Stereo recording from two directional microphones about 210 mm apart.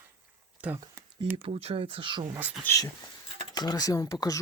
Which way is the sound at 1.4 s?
25° right (ahead or behind).